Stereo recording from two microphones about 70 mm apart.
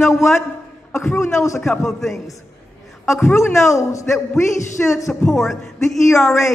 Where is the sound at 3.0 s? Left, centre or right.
Left.